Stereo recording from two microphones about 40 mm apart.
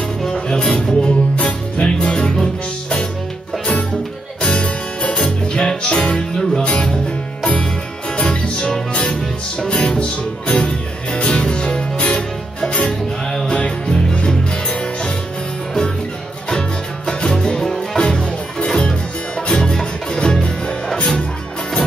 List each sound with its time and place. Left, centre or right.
0.2 s music: centre
4.4 s music: left
8.2 s music: left
13.3 s music: centre
16.4 s music: centre